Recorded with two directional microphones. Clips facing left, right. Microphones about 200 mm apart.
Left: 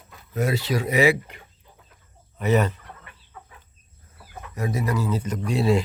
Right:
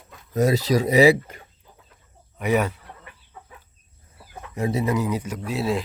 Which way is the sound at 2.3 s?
10° right (ahead or behind).